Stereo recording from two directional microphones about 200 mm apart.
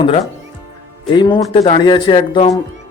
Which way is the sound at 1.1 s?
25° left (ahead or behind).